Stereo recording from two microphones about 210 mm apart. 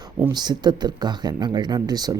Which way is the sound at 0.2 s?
20° right (ahead or behind).